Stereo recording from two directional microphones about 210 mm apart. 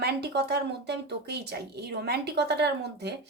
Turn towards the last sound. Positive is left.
turn(degrees=-50)  # may be behind; listen again after turning